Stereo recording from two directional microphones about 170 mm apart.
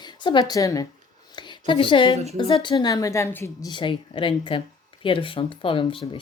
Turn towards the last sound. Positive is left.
turn(degrees=30)  # may be behind; listen again after turning